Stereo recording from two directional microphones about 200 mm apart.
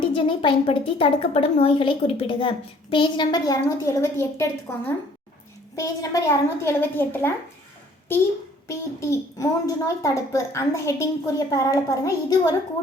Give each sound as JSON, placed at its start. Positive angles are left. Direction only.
{"t": 0.0, "sound": "a woman's voice", "side_deg": 25}
{"t": 5.7, "sound": "a child's voice", "side_deg": 15}
{"t": 8.6, "sound": "a child's voice", "side_deg": 15}